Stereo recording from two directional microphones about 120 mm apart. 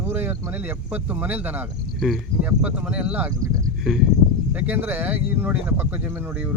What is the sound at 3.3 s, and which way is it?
Speech, 30° right (ahead or behind).